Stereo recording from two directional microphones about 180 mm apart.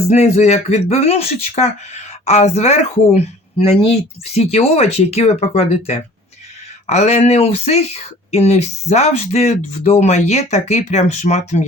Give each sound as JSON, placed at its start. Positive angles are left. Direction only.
{"t": 0.1, "sound": "speech", "side_deg": 35}